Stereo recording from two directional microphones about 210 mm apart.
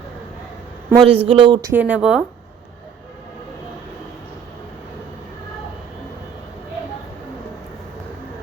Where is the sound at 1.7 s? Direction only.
5° right (ahead or behind).